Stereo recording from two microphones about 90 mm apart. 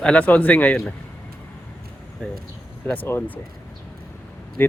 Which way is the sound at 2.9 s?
20° left (ahead or behind).